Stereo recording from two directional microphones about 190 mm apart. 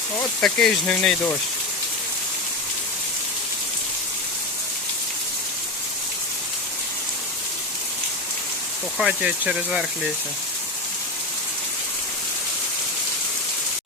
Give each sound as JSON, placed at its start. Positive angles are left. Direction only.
{"t": 0.4, "sound": "speech", "side_deg": 5}
{"t": 9.0, "sound": "speech", "side_deg": -5}